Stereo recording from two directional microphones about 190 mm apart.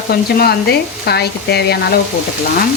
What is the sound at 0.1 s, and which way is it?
Frying, 55° left (ahead or behind).